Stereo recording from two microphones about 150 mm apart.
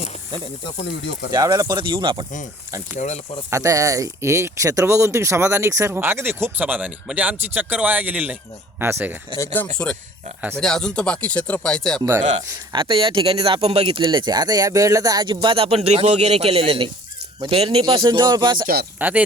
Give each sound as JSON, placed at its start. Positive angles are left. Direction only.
{"t": 1.3, "sound": "speech", "side_deg": -25}
{"t": 3.5, "sound": "speech", "side_deg": -20}
{"t": 9.3, "sound": "speech", "side_deg": 15}
{"t": 9.7, "sound": "speech", "side_deg": 5}
{"t": 12.7, "sound": "speech", "side_deg": -35}
{"t": 18.6, "sound": "speech", "side_deg": -80}
{"t": 18.9, "sound": "speech", "side_deg": -10}